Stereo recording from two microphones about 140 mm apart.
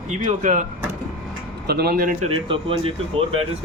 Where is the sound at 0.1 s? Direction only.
60° right (ahead or behind).